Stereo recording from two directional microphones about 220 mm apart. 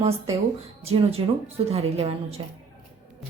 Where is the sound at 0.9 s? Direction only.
25° right (ahead or behind).